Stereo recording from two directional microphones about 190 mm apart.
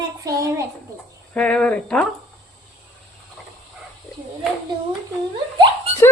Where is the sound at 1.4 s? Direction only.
5° left (ahead or behind).